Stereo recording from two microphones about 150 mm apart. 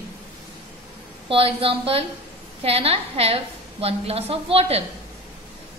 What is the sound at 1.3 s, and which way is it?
A woman's voice, 40° right (ahead or behind).